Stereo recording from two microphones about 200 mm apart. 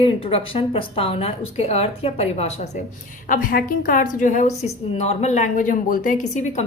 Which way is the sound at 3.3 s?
45° left (ahead or behind).